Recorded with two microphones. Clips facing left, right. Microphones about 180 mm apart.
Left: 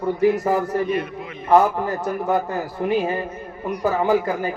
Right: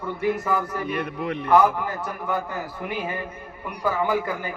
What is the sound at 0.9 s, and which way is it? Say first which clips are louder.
Speech: left 2 dB; 65° right (ahead or behind).